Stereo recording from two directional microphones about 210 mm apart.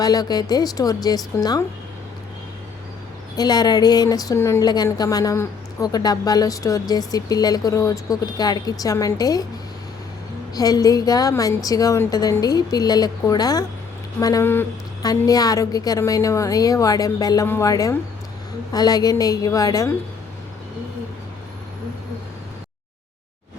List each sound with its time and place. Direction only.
0.0 s a woman's voice: 20° left (ahead or behind)
3.3 s a woman's voice: 20° left (ahead or behind)
10.5 s a woman's voice: 20° left (ahead or behind)